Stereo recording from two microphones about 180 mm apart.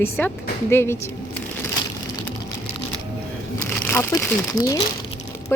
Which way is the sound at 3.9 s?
15° left (ahead or behind).